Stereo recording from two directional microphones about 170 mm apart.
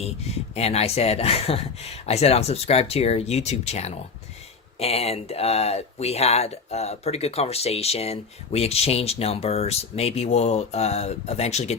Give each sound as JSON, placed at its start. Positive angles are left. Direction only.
{"t": 0.5, "sound": "speech", "side_deg": 35}